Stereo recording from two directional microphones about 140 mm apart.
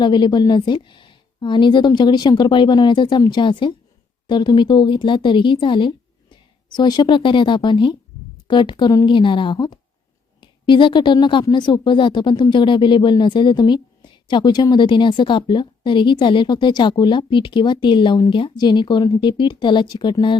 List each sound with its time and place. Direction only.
0.0 s a woman's voice: 35° left (ahead or behind)